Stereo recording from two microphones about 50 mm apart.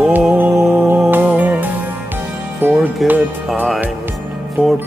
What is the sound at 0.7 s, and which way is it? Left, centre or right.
Music, right.